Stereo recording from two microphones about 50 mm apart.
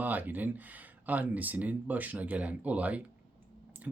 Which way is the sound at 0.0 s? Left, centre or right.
Right.